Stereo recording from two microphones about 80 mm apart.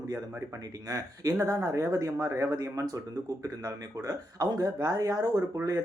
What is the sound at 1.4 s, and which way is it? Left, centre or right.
Speech, right.